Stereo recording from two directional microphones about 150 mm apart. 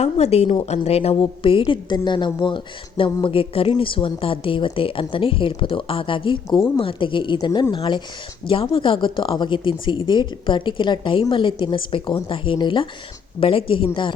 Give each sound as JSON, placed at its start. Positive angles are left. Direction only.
{"t": 0.0, "sound": "speech", "side_deg": 45}